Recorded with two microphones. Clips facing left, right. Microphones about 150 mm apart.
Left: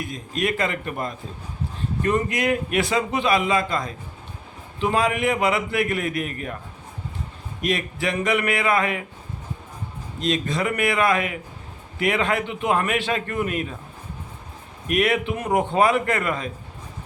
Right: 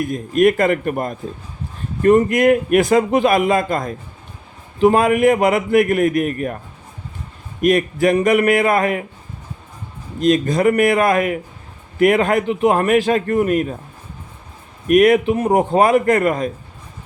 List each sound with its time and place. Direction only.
0.0 s a man's voice: 50° right (ahead or behind)
7.6 s a man's voice: 50° right (ahead or behind)
10.2 s a man's voice: 45° right (ahead or behind)
14.8 s a man's voice: 45° right (ahead or behind)